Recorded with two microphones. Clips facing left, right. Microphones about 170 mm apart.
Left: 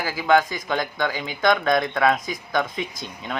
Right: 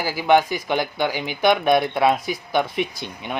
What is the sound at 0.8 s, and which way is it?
Speech, 10° right (ahead or behind).